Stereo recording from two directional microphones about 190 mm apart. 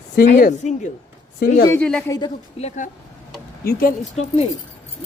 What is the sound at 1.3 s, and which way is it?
Speech, 55° left (ahead or behind).